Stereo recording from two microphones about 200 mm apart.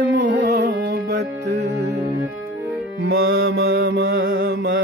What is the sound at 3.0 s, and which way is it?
Music, 50° right (ahead or behind).